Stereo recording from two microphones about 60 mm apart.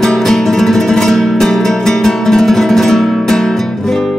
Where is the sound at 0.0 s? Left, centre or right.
Centre.